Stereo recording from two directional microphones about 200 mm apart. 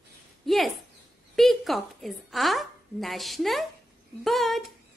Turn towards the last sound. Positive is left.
turn(degrees=0)  # may be behind; listen again after turning